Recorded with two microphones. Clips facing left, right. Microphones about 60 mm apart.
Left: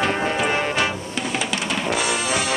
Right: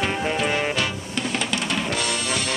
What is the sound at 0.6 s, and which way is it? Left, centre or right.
Drum kit, centre.